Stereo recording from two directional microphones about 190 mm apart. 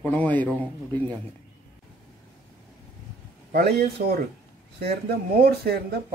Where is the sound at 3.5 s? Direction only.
55° right (ahead or behind).